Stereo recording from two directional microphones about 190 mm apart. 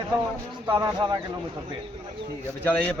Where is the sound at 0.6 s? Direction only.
20° right (ahead or behind).